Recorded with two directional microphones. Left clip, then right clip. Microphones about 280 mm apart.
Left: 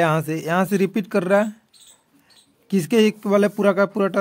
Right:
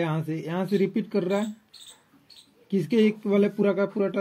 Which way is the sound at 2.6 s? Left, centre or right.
Left.